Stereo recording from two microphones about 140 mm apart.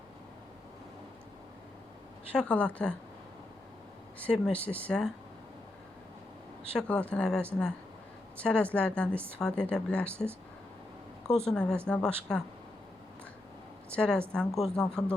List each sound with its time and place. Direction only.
2.3 s a woman's voice: 10° left (ahead or behind)
4.2 s a woman's voice: 10° left (ahead or behind)
6.7 s a woman's voice: 10° left (ahead or behind)
10.1 s speech: 15° right (ahead or behind)
11.4 s a woman's voice: 5° left (ahead or behind)
13.9 s a woman's voice: 5° left (ahead or behind)